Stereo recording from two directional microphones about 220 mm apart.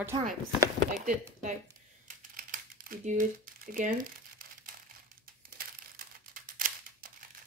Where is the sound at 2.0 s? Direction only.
40° right (ahead or behind).